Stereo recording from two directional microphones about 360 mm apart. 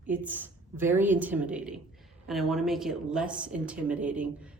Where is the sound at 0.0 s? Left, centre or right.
Centre.